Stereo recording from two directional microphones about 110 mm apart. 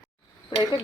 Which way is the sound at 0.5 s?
45° left (ahead or behind).